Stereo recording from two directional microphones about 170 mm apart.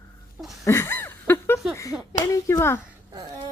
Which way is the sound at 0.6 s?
15° left (ahead or behind).